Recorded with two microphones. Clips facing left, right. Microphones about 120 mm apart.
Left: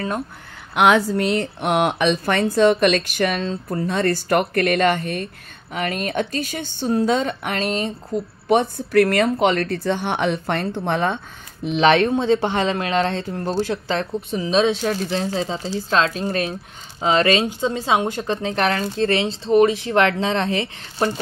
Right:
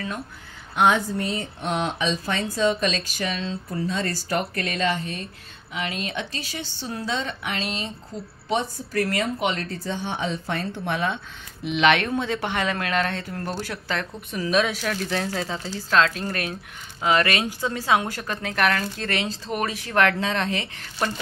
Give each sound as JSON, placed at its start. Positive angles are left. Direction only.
{"t": 0.7, "sound": "a woman's voice", "side_deg": 85}
{"t": 11.6, "sound": "speech", "side_deg": 35}